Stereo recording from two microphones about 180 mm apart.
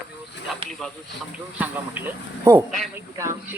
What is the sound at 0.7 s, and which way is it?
Speech, 5° left (ahead or behind).